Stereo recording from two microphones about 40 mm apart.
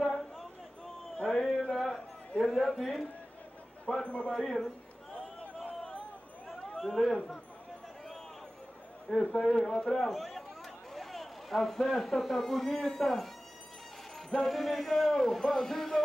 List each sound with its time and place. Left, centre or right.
0.0 s a sound: centre
1.1 s a sound: left
2.5 s a man's voice: centre
4.0 s speech: left
4.4 s speech: centre
6.8 s a man's voice: centre
9.3 s a man's voice: centre